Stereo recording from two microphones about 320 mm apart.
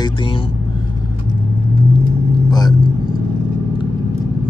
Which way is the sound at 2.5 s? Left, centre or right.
Centre.